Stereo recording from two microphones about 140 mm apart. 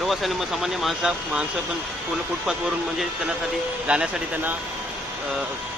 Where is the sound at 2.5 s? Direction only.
5° right (ahead or behind).